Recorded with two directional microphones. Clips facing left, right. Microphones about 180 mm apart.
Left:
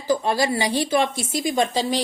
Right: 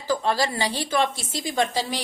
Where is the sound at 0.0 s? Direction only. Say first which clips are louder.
Left 3 dB; 15° left (ahead or behind).